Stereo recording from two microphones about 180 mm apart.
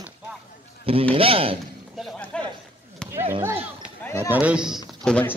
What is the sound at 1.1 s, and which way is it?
Speech, 30° right (ahead or behind).